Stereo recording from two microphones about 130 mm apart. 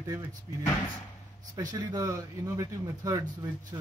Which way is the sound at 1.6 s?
30° right (ahead or behind).